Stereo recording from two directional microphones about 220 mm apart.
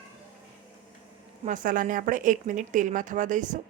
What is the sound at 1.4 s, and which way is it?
A woman's voice, 35° right (ahead or behind).